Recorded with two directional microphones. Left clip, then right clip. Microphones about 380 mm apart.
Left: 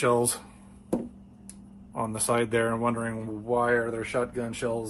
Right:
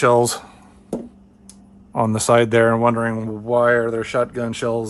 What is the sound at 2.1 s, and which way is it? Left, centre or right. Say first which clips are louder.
Speech: right 11 dB; right.